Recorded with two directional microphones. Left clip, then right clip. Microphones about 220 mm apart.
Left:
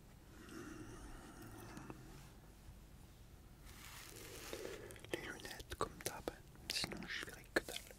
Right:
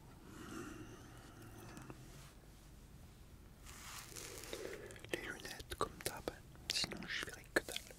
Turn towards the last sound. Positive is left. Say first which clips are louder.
# right 2 dB
turn(degrees=0)  # may be behind; listen again after turning